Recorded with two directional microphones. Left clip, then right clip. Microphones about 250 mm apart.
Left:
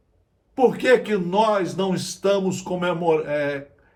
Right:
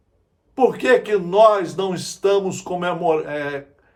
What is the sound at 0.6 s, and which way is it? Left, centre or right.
A man's voice, centre.